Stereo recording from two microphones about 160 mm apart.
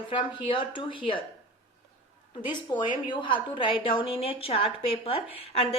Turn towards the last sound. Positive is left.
turn(degrees=35)  # may be behind; listen again after turning